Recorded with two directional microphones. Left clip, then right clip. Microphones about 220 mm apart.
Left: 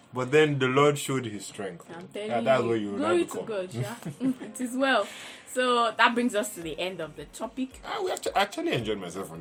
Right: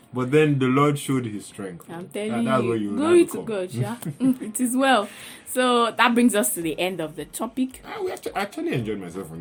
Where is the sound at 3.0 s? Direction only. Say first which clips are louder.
Right 11 dB; 40° right (ahead or behind).